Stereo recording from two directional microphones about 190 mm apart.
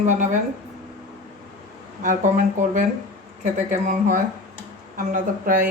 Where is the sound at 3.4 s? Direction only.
40° right (ahead or behind).